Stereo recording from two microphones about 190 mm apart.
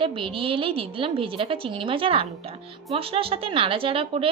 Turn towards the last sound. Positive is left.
turn(degrees=-30)  # may be behind; listen again after turning